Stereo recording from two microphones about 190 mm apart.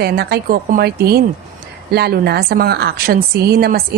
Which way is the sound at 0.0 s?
55° right (ahead or behind).